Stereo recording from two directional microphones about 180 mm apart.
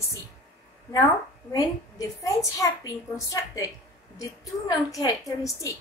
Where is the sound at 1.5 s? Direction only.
20° left (ahead or behind).